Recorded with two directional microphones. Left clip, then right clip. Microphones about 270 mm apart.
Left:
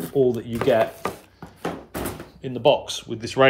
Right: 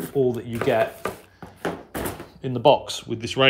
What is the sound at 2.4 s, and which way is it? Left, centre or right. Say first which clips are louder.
Speech: right 1 dB; centre.